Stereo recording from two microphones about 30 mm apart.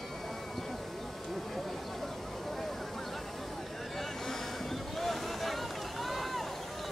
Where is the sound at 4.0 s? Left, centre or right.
Centre.